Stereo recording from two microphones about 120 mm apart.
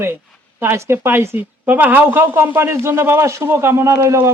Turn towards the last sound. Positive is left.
turn(degrees=-25)  # may be behind; listen again after turning